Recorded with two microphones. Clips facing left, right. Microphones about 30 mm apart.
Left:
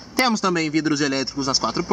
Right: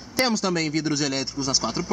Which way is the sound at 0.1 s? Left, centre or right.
Centre.